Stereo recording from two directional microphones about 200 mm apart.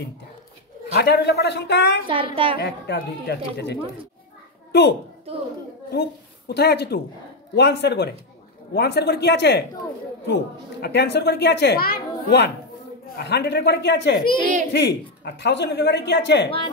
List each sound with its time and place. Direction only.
0.9 s a woman's voice: 55° left (ahead or behind)
2.0 s a woman's voice: 25° right (ahead or behind)
2.6 s a woman's voice: 55° left (ahead or behind)
6.4 s a woman's voice: 55° left (ahead or behind)
16.4 s speech: 25° left (ahead or behind)